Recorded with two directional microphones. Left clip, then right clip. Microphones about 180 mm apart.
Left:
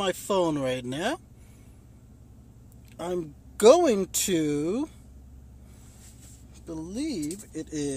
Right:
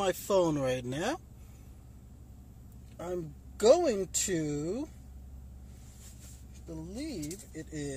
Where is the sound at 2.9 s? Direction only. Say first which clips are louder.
Left 6 dB; 35° left (ahead or behind).